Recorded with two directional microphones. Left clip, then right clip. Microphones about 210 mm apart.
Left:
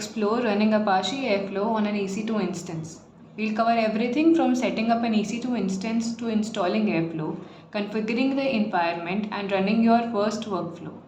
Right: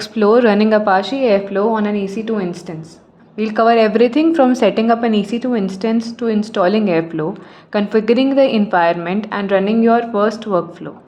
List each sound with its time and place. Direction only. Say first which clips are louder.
0.0 s a woman's voice: right 13 dB; 40° right (ahead or behind)
3.3 s a woman's voice: right 11 dB; 40° right (ahead or behind)